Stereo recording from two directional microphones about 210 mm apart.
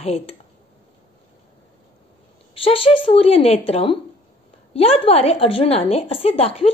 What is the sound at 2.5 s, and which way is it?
A woman's voice, 25° left (ahead or behind).